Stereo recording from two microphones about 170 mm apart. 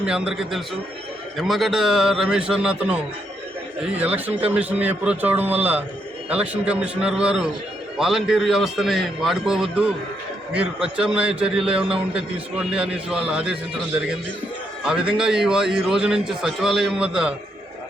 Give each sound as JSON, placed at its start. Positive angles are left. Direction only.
{"t": 0.0, "sound": "a man's voice", "side_deg": -5}
{"t": 14.8, "sound": "a man's voice", "side_deg": -5}